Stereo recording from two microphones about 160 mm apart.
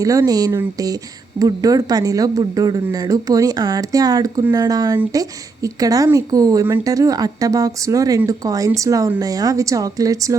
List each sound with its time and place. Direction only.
0.0 s a woman's voice: 20° right (ahead or behind)